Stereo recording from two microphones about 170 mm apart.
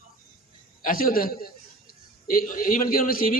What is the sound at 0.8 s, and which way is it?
A man's voice, 60° left (ahead or behind).